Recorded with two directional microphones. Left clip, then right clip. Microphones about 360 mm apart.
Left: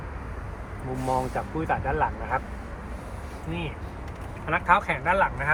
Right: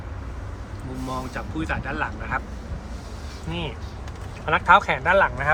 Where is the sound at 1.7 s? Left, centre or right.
Centre.